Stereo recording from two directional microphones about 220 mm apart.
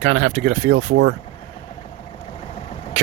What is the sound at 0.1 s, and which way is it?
Speech, 70° right (ahead or behind).